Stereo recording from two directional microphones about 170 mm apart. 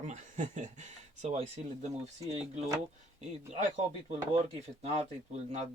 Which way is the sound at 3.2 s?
40° right (ahead or behind).